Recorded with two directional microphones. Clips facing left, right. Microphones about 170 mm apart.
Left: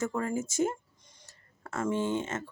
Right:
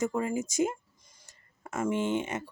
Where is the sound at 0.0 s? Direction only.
15° right (ahead or behind).